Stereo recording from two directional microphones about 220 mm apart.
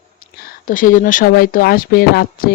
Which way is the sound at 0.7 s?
35° left (ahead or behind).